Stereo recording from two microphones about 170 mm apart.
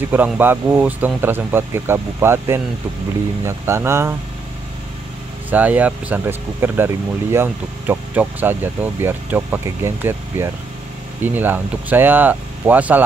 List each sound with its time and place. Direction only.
0.1 s speech: 10° right (ahead or behind)
5.5 s speech: 10° right (ahead or behind)